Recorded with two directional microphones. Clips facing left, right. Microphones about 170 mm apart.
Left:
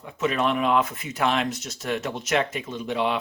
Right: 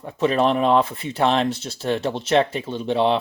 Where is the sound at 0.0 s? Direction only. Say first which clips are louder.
Right 5 dB; 35° right (ahead or behind).